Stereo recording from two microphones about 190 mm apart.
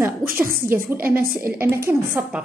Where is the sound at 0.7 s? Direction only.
10° right (ahead or behind).